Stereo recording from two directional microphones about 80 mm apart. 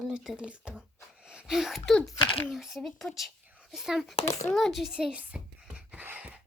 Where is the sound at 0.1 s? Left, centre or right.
Centre.